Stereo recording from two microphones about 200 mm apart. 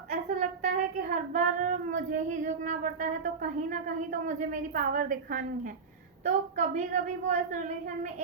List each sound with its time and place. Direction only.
0.1 s speech: 40° right (ahead or behind)